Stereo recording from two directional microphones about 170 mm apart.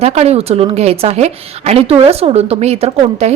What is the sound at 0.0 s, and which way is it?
Speech, 40° right (ahead or behind).